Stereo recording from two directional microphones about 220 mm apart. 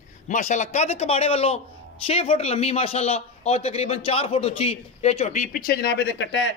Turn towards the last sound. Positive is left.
turn(degrees=55)  # may be behind; listen again after turning